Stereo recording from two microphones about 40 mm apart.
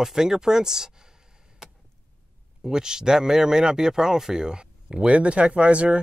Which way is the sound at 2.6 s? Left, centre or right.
Centre.